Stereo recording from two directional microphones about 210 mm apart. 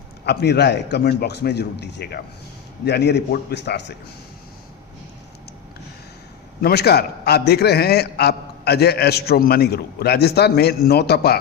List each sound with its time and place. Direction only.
0.3 s a man's voice: 50° left (ahead or behind)
6.6 s a man's voice: 50° left (ahead or behind)